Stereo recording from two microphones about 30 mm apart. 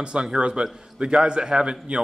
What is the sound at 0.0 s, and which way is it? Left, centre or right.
A man's voice, right.